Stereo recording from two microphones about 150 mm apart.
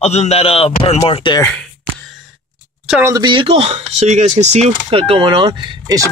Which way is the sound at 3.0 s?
25° right (ahead or behind).